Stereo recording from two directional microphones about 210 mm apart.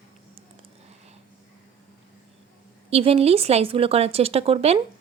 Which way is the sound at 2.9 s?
30° right (ahead or behind).